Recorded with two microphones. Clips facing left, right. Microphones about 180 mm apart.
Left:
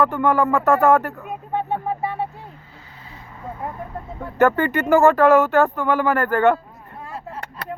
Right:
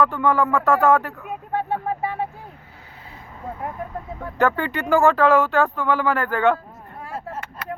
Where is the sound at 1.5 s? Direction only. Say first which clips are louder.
Left 1 dB; 10° right (ahead or behind).